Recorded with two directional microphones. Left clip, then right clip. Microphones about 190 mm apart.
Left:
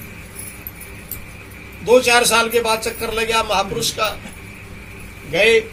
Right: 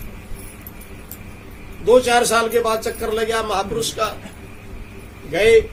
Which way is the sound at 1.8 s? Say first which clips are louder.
Left 1 dB; 25° right (ahead or behind).